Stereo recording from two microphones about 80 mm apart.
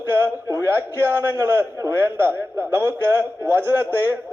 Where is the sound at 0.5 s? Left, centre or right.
Right.